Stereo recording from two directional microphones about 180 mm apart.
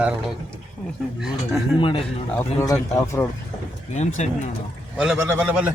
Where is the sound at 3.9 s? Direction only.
40° left (ahead or behind).